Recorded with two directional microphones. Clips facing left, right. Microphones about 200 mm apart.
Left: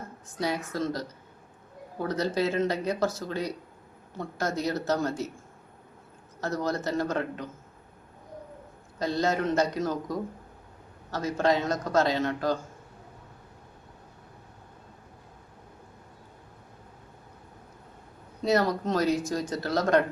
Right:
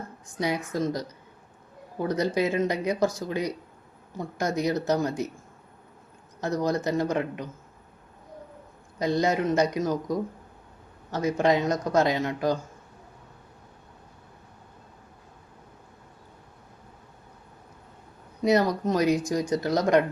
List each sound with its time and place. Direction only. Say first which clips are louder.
0.3 s speech: right 2 dB; 15° right (ahead or behind)
6.4 s speech: right 3 dB; 15° right (ahead or behind)
9.0 s speech: right 3 dB; 15° right (ahead or behind)
18.4 s speech: right 3 dB; 15° right (ahead or behind)